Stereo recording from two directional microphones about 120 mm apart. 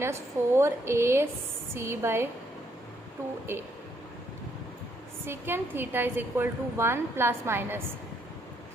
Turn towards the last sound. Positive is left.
turn(degrees=-20)  # may be behind; listen again after turning